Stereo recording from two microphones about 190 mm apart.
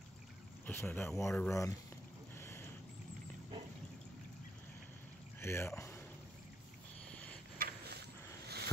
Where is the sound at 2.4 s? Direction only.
15° left (ahead or behind).